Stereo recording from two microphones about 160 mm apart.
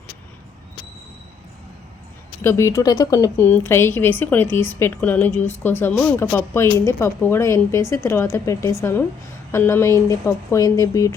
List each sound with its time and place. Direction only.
2.4 s speech: 15° left (ahead or behind)